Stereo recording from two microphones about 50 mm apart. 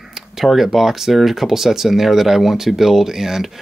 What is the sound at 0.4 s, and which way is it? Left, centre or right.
Speech, centre.